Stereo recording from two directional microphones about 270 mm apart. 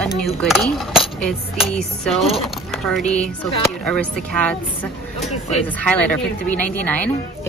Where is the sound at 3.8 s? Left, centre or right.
Centre.